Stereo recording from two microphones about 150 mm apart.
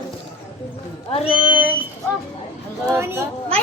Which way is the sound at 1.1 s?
35° left (ahead or behind).